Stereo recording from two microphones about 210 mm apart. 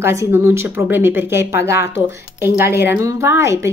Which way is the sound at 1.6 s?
50° left (ahead or behind).